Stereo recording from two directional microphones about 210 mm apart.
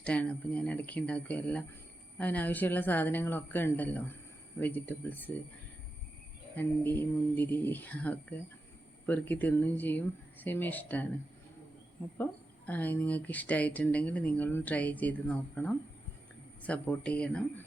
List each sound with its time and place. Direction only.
0.0 s speech: 5° left (ahead or behind)
6.6 s speech: 10° left (ahead or behind)
12.1 s speech: 5° left (ahead or behind)